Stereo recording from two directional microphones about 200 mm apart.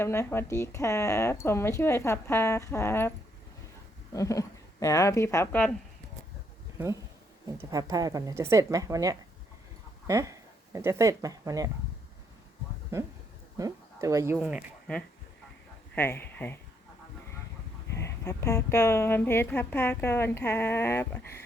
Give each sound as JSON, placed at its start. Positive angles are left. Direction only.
{"t": 0.0, "sound": "a woman's voice", "side_deg": 10}
{"t": 4.1, "sound": "a woman's voice", "side_deg": 15}
{"t": 7.6, "sound": "a woman's voice", "side_deg": -15}
{"t": 12.9, "sound": "a woman's voice", "side_deg": -15}
{"t": 14.3, "sound": "speech", "side_deg": 0}
{"t": 16.0, "sound": "speech", "side_deg": 10}
{"t": 17.9, "sound": "a woman's voice", "side_deg": 15}